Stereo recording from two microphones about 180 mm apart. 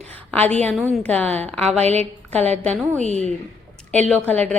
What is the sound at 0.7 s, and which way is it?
A woman's voice, 5° left (ahead or behind).